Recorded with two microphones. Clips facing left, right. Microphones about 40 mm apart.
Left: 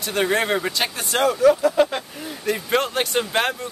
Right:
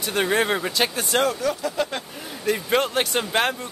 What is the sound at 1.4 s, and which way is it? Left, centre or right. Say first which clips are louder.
Speech: left 9 dB; centre.